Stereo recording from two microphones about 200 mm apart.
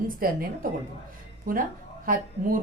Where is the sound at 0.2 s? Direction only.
45° right (ahead or behind).